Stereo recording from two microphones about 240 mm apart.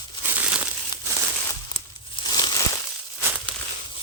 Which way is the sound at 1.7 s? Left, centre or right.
Centre.